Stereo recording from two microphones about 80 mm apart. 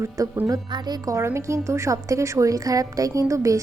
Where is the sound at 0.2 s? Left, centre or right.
Right.